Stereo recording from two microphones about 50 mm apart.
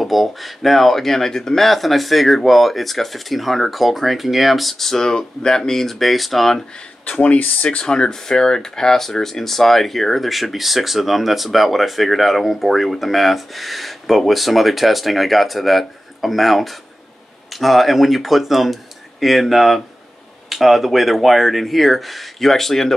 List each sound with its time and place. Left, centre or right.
0.0 s speech: centre
7.1 s speech: left; by 22.9 s centre